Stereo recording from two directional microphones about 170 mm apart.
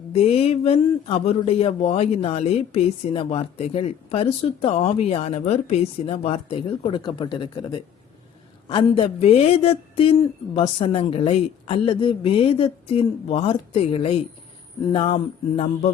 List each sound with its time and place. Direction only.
0.1 s speech: 35° left (ahead or behind)